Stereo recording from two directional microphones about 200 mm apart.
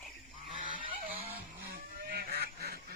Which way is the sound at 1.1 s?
30° right (ahead or behind).